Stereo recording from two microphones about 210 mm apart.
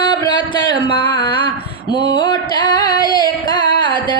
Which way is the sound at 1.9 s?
55° right (ahead or behind).